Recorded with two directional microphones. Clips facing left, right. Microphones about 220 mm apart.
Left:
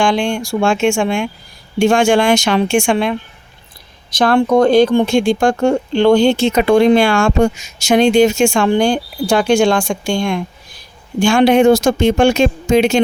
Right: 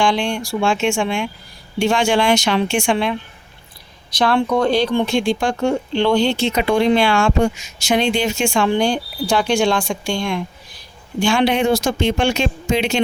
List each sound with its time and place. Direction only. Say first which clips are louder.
0.0 s speech: left 3 dB; 50° left (ahead or behind)